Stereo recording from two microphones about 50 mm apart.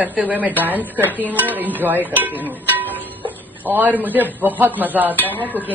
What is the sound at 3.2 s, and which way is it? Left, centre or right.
A man's voice, right.